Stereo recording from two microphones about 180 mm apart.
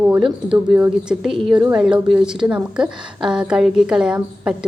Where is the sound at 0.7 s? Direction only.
5° right (ahead or behind).